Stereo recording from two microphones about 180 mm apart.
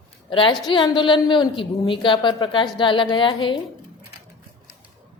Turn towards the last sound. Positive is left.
turn(degrees=30)  # may be behind; listen again after turning